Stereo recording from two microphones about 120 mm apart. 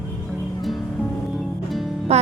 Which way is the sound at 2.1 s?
60° right (ahead or behind).